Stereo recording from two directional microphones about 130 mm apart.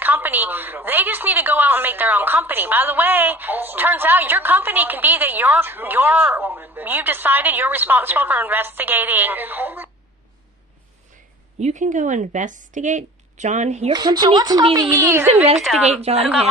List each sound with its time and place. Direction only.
0.0 s a woman's voice: 15° right (ahead or behind)
11.6 s a woman's voice: 70° right (ahead or behind)
13.9 s speech: 30° right (ahead or behind)
14.8 s speech: 20° right (ahead or behind)
15.3 s speech: 50° right (ahead or behind)
15.5 s a woman's voice: centre (ahead or behind)
15.9 s speech: 50° right (ahead or behind)